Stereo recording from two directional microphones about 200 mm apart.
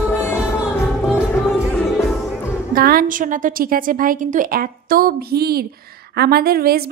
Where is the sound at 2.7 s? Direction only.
45° right (ahead or behind).